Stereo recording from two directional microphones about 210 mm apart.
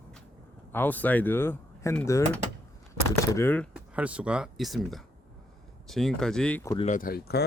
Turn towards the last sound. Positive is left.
turn(degrees=50)  # may be behind; listen again after turning